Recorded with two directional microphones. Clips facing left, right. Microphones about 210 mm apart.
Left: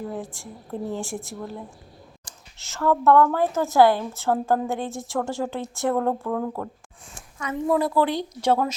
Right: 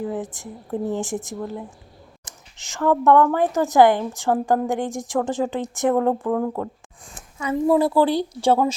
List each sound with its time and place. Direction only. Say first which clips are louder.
0.1 s a woman's voice: right 4 dB; 20° right (ahead or behind)
7.1 s speech: right 6 dB; 25° right (ahead or behind)